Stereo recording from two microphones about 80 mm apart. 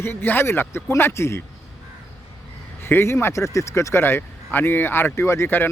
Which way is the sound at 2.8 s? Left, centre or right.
Left.